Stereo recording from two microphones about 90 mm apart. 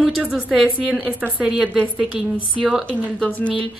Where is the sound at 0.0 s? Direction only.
Centre (ahead or behind).